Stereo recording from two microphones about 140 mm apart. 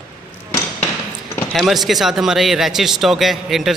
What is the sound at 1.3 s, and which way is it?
Speech, centre (ahead or behind).